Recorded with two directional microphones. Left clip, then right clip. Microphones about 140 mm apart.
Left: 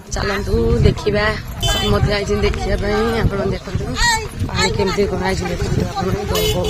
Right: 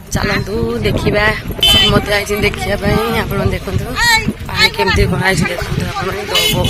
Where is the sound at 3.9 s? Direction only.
45° left (ahead or behind).